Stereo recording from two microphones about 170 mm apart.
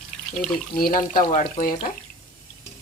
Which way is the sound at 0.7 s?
55° left (ahead or behind).